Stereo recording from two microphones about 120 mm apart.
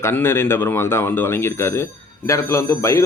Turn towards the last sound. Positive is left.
turn(degrees=25)  # may be behind; listen again after turning